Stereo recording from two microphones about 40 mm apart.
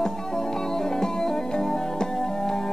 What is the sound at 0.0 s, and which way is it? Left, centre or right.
Music, centre.